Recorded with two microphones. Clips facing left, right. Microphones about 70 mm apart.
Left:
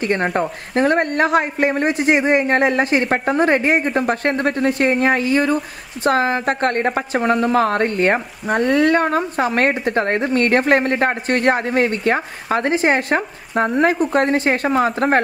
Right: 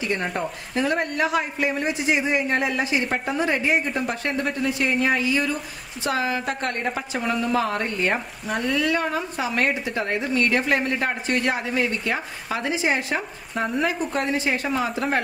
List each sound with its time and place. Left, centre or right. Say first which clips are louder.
0.0 s a woman's voice: left 7 dB; left